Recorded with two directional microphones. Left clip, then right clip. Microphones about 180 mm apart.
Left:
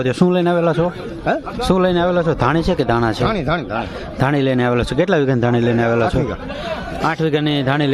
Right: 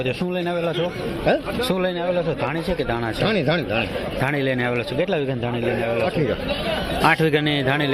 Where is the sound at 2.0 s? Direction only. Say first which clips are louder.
Left 6 dB; 50° left (ahead or behind).